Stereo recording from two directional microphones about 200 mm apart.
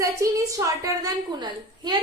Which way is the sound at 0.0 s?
15° right (ahead or behind).